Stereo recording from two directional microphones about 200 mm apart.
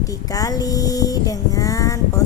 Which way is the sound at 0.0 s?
15° left (ahead or behind).